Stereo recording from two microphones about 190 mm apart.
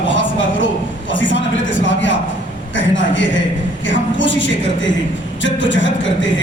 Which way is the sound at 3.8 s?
75° left (ahead or behind).